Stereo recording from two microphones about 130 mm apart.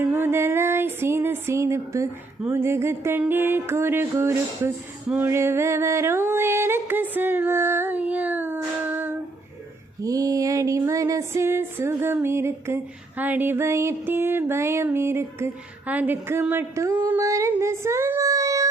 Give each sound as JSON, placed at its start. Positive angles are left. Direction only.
{"t": 0.0, "sound": "a sound", "side_deg": -15}
{"t": 2.4, "sound": "music", "side_deg": -15}
{"t": 10.0, "sound": "music", "side_deg": -25}